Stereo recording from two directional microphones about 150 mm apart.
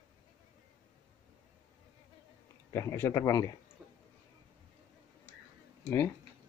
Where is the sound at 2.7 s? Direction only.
20° left (ahead or behind).